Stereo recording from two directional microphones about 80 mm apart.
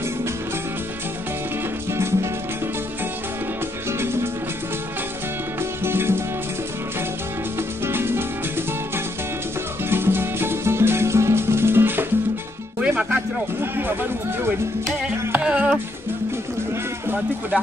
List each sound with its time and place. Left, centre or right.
1.9 s music: right
4.0 s music: right
5.6 s music: right
7.8 s music: right
9.8 s music: right
12.8 s music: centre
13.6 s speech: right
15.0 s music: centre